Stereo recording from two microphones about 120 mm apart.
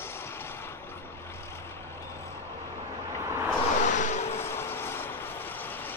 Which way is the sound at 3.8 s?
90° left.